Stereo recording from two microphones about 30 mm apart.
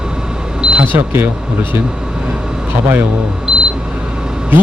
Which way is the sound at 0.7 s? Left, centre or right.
Right.